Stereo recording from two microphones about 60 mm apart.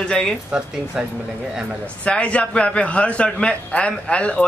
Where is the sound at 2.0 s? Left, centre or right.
Centre.